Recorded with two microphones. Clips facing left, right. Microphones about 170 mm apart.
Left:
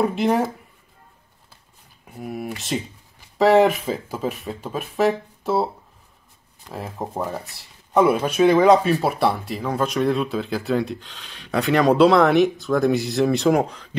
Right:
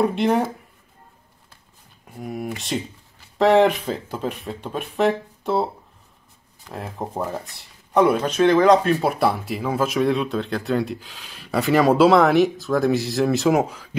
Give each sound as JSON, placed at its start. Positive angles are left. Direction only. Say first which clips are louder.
{"t": 0.0, "sound": "speech", "louder": "even", "side_deg": 0}
{"t": 2.0, "sound": "speech", "louder": "right 1 dB", "side_deg": 0}
{"t": 6.7, "sound": "speech", "louder": "even", "side_deg": 0}